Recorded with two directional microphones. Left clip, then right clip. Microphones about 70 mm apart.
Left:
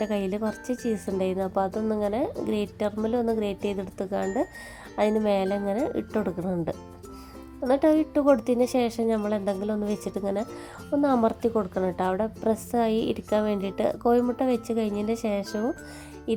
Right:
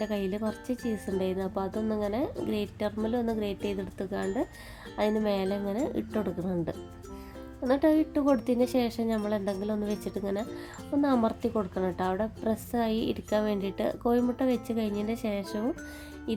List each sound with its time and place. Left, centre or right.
0.0 s a woman's voice: left